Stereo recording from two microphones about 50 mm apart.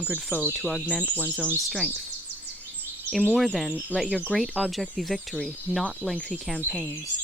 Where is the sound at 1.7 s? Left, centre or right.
Centre.